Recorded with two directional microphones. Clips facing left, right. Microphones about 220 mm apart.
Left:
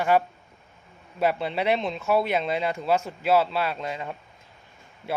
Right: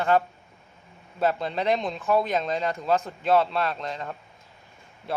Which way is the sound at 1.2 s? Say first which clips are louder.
Left 1 dB; 10° left (ahead or behind).